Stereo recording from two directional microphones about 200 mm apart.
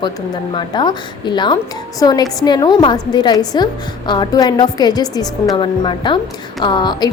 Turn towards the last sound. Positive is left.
turn(degrees=20)  # may be behind; listen again after turning